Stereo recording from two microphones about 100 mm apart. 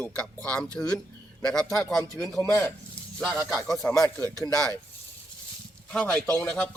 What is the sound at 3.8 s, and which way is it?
Speech, 20° left (ahead or behind).